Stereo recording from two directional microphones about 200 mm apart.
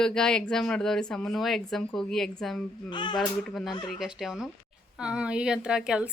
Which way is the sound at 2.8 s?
25° left (ahead or behind).